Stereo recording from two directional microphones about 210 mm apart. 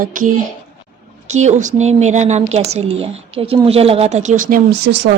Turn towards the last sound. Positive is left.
turn(degrees=-40)  # may be behind; listen again after turning